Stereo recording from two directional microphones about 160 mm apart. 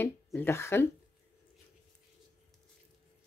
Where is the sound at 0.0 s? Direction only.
10° left (ahead or behind).